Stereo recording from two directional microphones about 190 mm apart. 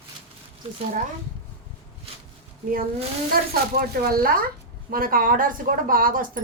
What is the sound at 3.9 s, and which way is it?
A woman's voice, 50° right (ahead or behind).